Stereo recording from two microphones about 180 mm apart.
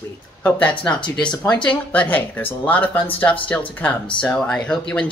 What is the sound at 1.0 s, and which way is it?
Speech, 25° left (ahead or behind).